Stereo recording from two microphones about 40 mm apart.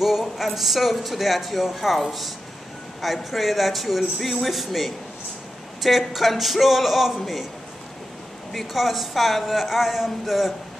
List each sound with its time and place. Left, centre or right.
0.0 s a sound: centre
0.6 s speech: centre
8.5 s speech: centre